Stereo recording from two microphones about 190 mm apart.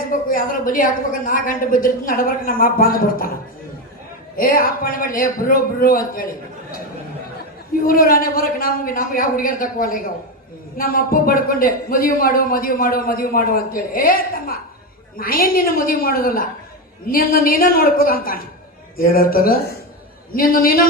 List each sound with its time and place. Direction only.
0.1 s a man's voice: 45° left (ahead or behind)
4.4 s a man's voice: 50° left (ahead or behind)
7.9 s a man's voice: 50° left (ahead or behind)